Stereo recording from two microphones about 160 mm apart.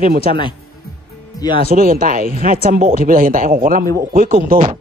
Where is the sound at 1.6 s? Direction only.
60° right (ahead or behind).